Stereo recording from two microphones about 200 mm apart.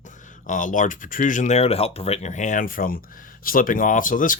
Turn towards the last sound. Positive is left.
turn(degrees=40)  # may be behind; listen again after turning